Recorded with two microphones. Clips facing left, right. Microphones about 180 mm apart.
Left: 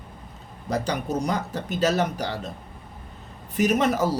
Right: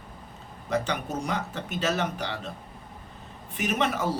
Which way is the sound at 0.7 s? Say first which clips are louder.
Left 3 dB; 35° left (ahead or behind).